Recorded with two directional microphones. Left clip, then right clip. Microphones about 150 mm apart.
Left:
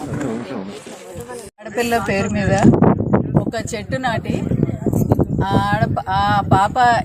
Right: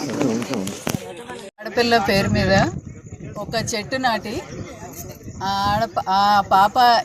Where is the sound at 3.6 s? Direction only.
40° left (ahead or behind).